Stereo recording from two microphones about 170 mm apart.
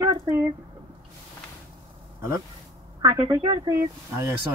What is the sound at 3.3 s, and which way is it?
Speech, 25° right (ahead or behind).